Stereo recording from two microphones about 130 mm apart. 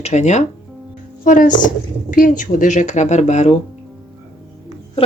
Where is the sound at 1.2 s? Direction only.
90° left; by 3.6 s 60° left (ahead or behind).